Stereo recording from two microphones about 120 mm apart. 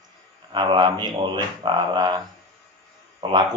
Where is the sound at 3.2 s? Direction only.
40° right (ahead or behind).